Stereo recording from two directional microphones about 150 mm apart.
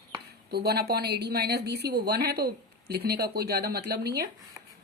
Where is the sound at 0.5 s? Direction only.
90° right.